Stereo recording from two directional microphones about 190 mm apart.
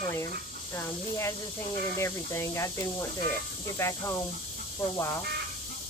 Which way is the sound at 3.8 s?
15° left (ahead or behind).